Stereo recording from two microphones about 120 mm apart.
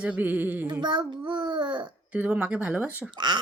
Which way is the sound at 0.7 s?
40° right (ahead or behind).